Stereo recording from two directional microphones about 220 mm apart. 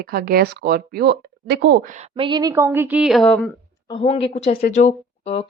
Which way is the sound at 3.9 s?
25° left (ahead or behind).